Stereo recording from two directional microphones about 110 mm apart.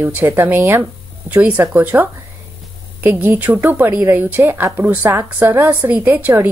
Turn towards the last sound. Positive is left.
turn(degrees=-15)  # may be behind; listen again after turning